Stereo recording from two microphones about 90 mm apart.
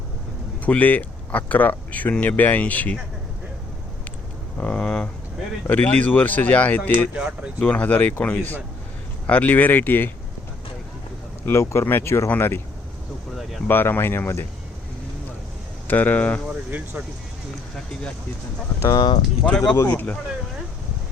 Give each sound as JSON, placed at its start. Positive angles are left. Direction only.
{"t": 0.6, "sound": "speech", "side_deg": 15}
{"t": 4.6, "sound": "speech", "side_deg": 10}
{"t": 7.2, "sound": "speech", "side_deg": -10}
{"t": 7.6, "sound": "speech", "side_deg": 15}
{"t": 11.4, "sound": "speech", "side_deg": 30}
{"t": 13.7, "sound": "speech", "side_deg": 25}
{"t": 15.9, "sound": "speech", "side_deg": 20}
{"t": 18.8, "sound": "speech", "side_deg": 45}
{"t": 19.5, "sound": "speech", "side_deg": 5}
{"t": 19.7, "sound": "speech", "side_deg": 30}